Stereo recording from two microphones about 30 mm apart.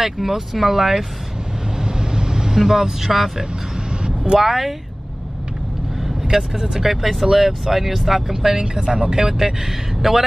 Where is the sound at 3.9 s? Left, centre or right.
Right.